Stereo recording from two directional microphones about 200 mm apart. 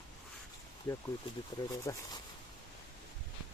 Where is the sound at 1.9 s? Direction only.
20° left (ahead or behind).